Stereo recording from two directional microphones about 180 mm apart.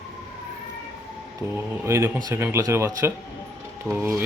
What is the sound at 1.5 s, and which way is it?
Speech, 15° right (ahead or behind).